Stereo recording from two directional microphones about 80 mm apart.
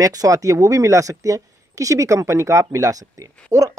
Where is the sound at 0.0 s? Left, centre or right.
Right.